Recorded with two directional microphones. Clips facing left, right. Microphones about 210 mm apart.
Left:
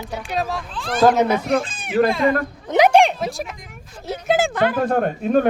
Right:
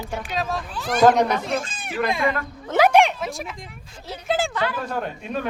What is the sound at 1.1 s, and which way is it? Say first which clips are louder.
Speech: left 3 dB; 5° left (ahead or behind).